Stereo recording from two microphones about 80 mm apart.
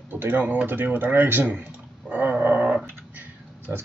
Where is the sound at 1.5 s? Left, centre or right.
Centre.